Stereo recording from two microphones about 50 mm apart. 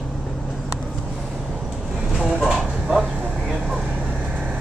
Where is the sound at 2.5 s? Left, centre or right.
Centre.